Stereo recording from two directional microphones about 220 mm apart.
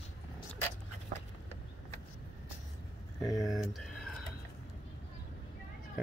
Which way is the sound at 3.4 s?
Centre (ahead or behind).